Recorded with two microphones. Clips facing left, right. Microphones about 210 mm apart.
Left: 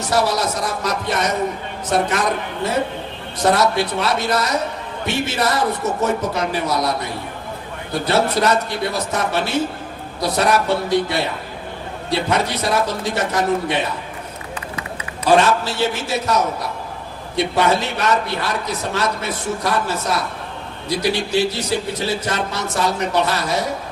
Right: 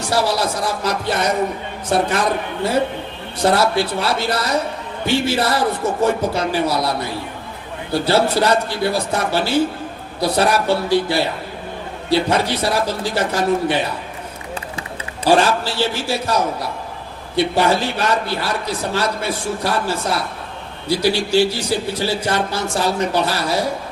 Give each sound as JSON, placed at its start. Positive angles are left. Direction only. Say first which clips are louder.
{"t": 0.1, "sound": "a man's voice", "louder": "even", "side_deg": -30}
{"t": 3.4, "sound": "a man's voice", "louder": "right 1 dB", "side_deg": -30}
{"t": 14.8, "sound": "a man's voice", "louder": "even", "side_deg": -30}